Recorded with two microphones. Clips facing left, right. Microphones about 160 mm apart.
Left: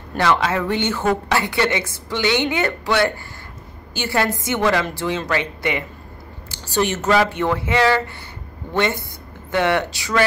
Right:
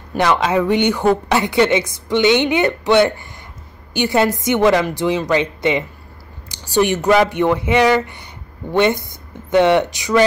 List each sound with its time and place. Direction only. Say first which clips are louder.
0.2 s a woman's voice: right 3 dB; 15° right (ahead or behind)